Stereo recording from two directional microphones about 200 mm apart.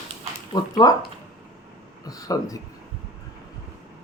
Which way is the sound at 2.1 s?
15° left (ahead or behind).